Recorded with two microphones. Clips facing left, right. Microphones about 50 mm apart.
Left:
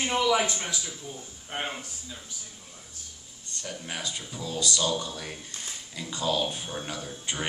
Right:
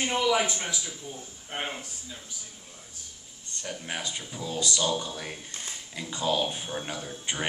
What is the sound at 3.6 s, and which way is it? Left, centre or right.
Speech, centre.